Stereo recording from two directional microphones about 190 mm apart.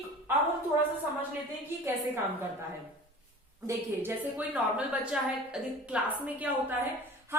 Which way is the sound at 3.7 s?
10° right (ahead or behind).